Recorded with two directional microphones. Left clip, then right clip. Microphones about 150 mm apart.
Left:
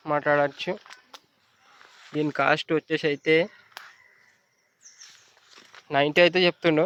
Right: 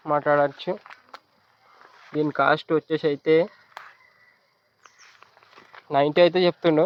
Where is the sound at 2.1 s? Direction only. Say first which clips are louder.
Right 2 dB; 20° left (ahead or behind).